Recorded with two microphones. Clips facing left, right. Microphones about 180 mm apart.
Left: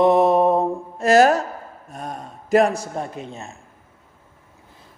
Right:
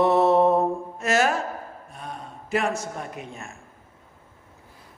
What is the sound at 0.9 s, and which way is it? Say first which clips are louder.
Speech: left 9 dB; 35° left (ahead or behind).